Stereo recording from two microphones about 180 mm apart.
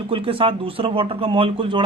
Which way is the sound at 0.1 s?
30° right (ahead or behind).